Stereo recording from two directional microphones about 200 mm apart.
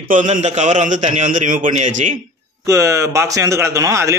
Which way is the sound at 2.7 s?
15° right (ahead or behind).